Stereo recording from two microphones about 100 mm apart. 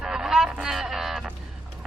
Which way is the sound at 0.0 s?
5° right (ahead or behind).